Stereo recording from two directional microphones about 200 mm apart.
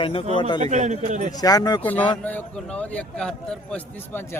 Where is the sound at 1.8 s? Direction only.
10° left (ahead or behind).